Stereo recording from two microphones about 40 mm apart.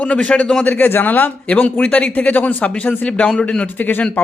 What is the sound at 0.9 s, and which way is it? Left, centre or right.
Speech, left.